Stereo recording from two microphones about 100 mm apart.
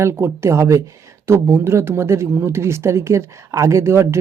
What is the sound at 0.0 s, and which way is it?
Speech, 25° right (ahead or behind).